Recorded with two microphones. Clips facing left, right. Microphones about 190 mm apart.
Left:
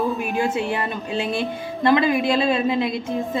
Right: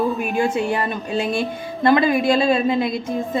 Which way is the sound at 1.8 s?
35° right (ahead or behind).